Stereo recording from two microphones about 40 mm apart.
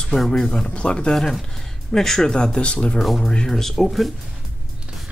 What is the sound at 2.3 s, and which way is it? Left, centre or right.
Speech, left.